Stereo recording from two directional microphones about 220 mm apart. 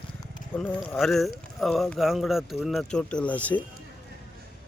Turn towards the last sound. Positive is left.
turn(degrees=5)  # may be behind; listen again after turning